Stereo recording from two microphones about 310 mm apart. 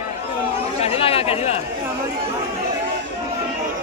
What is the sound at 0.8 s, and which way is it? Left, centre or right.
Speech, centre.